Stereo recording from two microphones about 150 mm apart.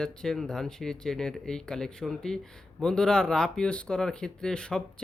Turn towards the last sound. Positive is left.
turn(degrees=5)  # may be behind; listen again after turning